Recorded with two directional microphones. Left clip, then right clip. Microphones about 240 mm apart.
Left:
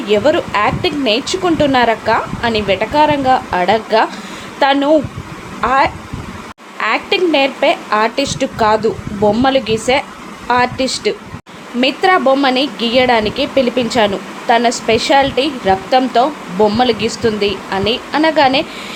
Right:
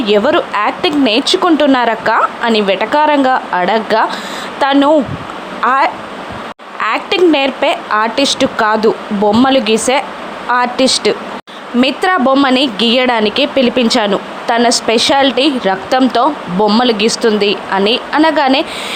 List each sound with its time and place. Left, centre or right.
0.0 s a woman's voice: centre